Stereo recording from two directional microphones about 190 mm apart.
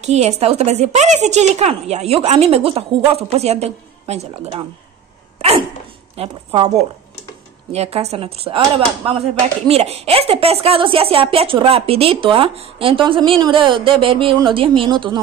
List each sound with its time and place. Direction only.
0.0 s speech: 35° right (ahead or behind)
6.1 s speech: 25° right (ahead or behind)
7.7 s speech: 35° right (ahead or behind)